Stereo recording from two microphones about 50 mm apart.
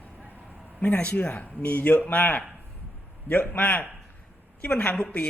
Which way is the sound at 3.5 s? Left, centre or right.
Left.